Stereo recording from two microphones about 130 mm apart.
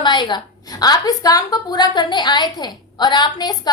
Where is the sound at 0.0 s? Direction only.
35° left (ahead or behind).